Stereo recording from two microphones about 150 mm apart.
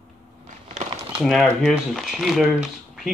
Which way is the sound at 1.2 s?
Centre (ahead or behind).